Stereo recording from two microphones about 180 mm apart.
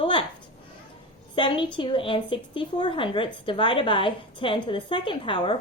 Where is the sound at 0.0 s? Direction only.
30° left (ahead or behind).